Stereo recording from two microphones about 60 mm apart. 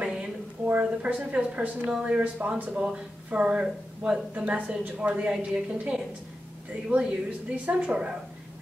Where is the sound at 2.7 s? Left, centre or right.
Centre.